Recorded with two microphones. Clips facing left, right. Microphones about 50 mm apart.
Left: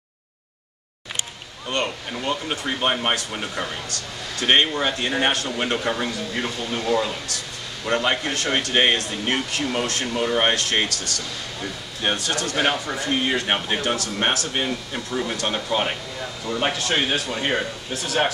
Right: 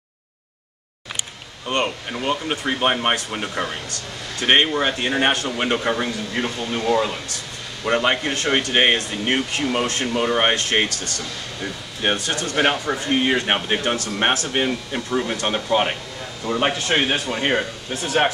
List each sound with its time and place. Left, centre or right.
1.7 s speech: right
14.6 s speech: centre